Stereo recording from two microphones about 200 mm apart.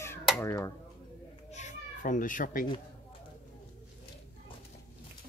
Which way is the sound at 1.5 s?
35° left (ahead or behind).